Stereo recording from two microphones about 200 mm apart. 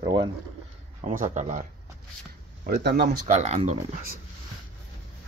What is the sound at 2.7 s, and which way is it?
Speech, 55° right (ahead or behind).